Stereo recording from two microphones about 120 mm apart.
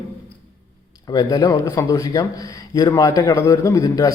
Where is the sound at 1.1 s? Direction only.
30° left (ahead or behind).